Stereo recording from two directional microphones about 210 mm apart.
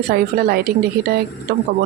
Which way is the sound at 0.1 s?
45° right (ahead or behind).